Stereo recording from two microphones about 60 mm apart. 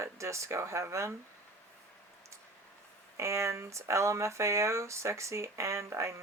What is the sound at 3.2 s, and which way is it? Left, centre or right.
Speech, right.